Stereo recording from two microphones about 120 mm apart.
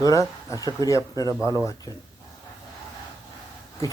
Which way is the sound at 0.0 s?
30° left (ahead or behind).